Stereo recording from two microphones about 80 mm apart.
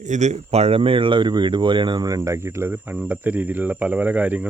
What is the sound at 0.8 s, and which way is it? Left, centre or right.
Speech, right.